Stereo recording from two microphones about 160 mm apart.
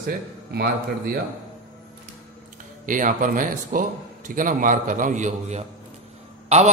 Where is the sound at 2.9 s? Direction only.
55° right (ahead or behind).